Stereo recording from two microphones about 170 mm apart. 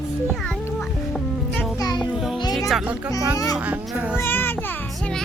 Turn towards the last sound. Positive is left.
turn(degrees=10)  # may be behind; listen again after turning